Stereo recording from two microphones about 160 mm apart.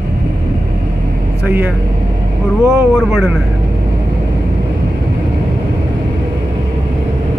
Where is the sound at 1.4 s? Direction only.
10° right (ahead or behind).